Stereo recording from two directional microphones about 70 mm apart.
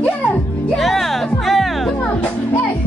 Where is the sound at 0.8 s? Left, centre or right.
Centre.